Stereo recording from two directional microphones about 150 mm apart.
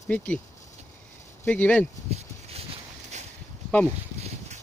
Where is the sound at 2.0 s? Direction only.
45° right (ahead or behind).